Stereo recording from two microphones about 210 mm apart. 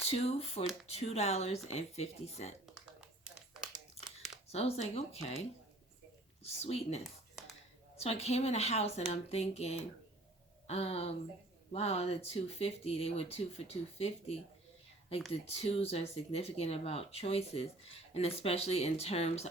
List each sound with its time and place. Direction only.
0.0 s speech: 30° left (ahead or behind)
3.2 s crumpling: 5° right (ahead or behind)
4.4 s speech: 30° left (ahead or behind)